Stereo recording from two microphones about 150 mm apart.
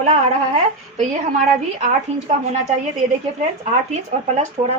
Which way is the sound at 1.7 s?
50° right (ahead or behind).